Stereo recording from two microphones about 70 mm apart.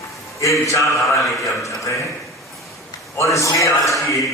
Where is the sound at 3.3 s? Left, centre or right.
Left.